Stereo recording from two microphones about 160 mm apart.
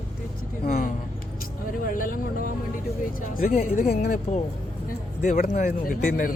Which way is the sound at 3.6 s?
50° left (ahead or behind).